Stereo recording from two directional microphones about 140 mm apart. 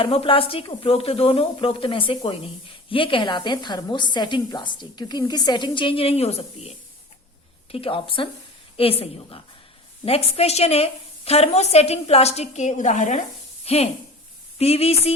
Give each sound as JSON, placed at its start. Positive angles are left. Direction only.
{"t": 0.0, "sound": "a woman's voice", "side_deg": 40}